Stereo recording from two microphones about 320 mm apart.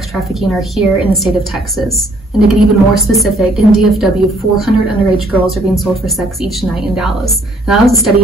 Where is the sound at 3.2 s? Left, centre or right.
Centre.